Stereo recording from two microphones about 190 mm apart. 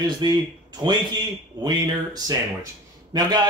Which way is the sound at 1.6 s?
20° right (ahead or behind).